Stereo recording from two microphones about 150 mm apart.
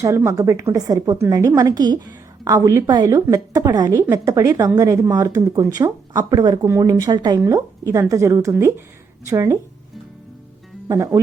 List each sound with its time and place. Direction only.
0.2 s speech: 20° right (ahead or behind)
10.8 s speech: 20° right (ahead or behind)